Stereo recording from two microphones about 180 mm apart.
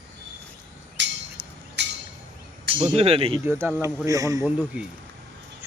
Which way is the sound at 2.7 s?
35° right (ahead or behind).